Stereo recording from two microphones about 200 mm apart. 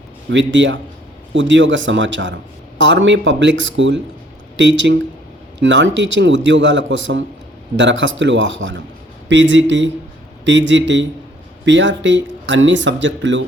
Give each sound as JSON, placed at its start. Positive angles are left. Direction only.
{"t": 0.3, "sound": "a man's voice", "side_deg": -65}